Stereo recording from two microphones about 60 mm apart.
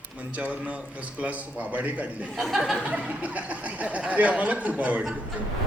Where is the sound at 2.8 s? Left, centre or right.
Right.